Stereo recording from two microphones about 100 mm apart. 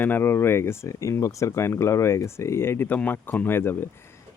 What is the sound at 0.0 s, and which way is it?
Speech, 20° left (ahead or behind).